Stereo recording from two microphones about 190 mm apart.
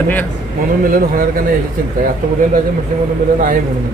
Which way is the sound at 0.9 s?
50° right (ahead or behind).